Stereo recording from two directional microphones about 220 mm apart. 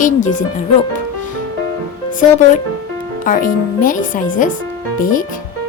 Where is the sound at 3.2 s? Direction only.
35° left (ahead or behind).